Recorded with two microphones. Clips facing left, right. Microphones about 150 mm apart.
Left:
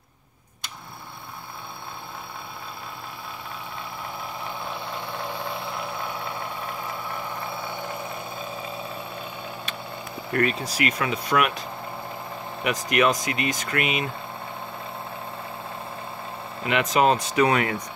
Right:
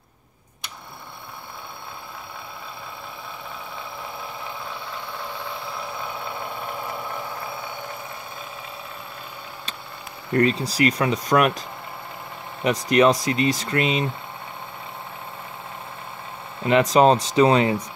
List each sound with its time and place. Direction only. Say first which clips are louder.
10.3 s speech: right 4 dB; 30° right (ahead or behind)
12.6 s speech: right 5 dB; 30° right (ahead or behind)
16.6 s speech: right 5 dB; 35° right (ahead or behind)